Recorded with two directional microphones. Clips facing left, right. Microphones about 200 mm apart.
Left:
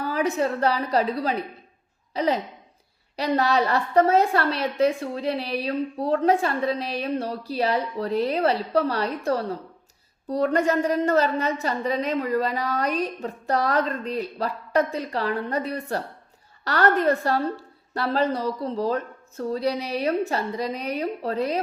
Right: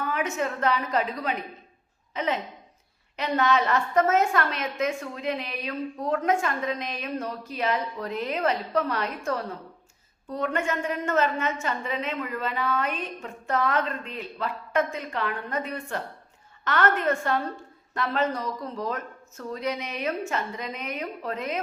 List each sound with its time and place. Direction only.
0.0 s a woman's voice: 35° left (ahead or behind)